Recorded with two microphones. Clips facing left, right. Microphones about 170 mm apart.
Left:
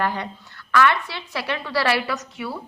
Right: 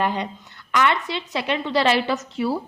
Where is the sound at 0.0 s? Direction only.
20° right (ahead or behind).